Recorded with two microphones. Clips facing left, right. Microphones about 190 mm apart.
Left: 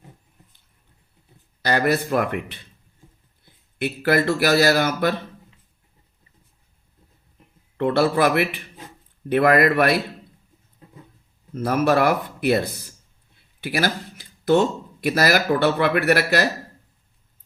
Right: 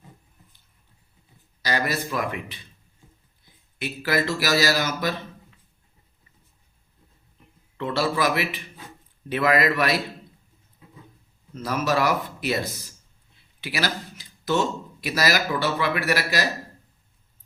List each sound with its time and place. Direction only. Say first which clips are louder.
1.6 s speech: left 6 dB; 55° left (ahead or behind)
3.8 s speech: left 5 dB; 55° left (ahead or behind)
7.8 s speech: left 6 dB; 55° left (ahead or behind)
11.5 s speech: left 5 dB; 55° left (ahead or behind)